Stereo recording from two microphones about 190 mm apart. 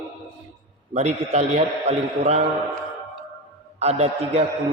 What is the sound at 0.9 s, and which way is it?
A man's voice, 35° right (ahead or behind).